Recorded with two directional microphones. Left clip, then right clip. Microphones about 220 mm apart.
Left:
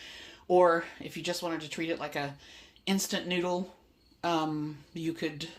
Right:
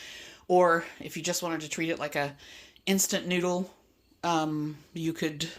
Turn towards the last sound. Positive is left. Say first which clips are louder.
# right 3 dB
turn(degrees=-35)  # may be behind; listen again after turning